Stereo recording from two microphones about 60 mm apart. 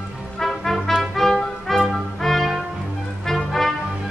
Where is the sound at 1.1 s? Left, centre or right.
Centre.